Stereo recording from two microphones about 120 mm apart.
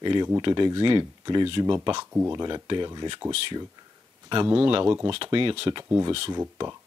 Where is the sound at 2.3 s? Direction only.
35° right (ahead or behind).